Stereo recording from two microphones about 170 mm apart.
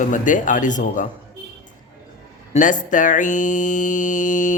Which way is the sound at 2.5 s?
50° left (ahead or behind).